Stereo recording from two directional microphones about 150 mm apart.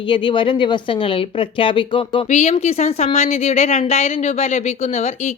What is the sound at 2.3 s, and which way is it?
A woman's voice, 50° left (ahead or behind).